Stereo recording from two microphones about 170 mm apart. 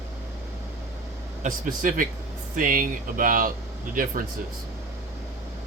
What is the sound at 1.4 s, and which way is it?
Speech, 50° right (ahead or behind).